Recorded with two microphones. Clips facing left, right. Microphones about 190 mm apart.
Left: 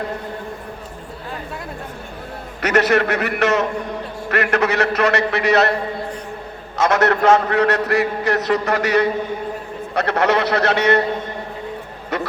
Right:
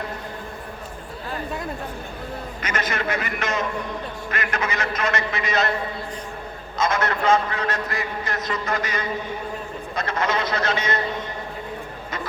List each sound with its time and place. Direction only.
2.6 s a man's voice: 70° left (ahead or behind)
6.7 s a man's voice: 70° left (ahead or behind)
12.1 s a man's voice: 70° left (ahead or behind)